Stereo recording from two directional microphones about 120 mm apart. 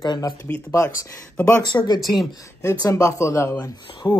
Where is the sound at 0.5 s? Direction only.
20° left (ahead or behind).